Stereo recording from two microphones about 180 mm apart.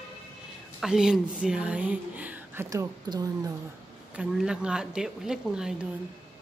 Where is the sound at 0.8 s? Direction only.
5° right (ahead or behind); by 3.5 s 20° right (ahead or behind).